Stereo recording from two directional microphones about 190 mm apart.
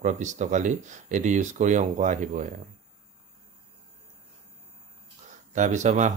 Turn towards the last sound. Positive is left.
turn(degrees=-40)  # may be behind; listen again after turning